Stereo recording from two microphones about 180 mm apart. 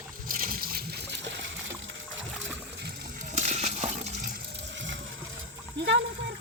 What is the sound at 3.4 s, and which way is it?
Coin, 40° right (ahead or behind).